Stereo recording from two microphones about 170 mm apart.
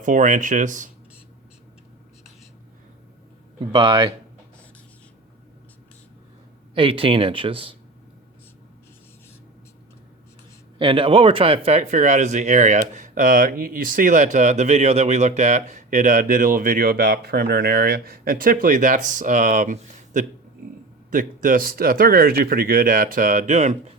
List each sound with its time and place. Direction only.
0.0 s speech: 50° right (ahead or behind)
3.7 s speech: 30° right (ahead or behind)
6.7 s speech: 30° right (ahead or behind)
10.8 s speech: 30° right (ahead or behind)